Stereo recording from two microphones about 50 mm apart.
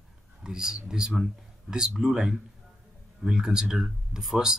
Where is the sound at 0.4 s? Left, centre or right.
Centre.